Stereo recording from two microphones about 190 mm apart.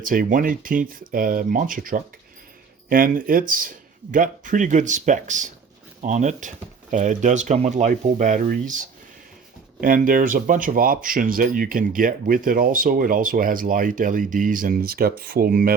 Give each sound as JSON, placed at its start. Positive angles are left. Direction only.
{"t": 0.0, "sound": "speech", "side_deg": -45}